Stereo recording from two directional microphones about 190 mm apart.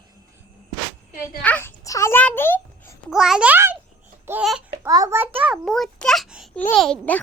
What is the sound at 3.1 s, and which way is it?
A child's voice, 5° right (ahead or behind).